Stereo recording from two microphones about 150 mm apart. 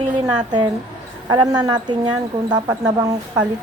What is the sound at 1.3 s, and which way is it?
Speech, 30° right (ahead or behind).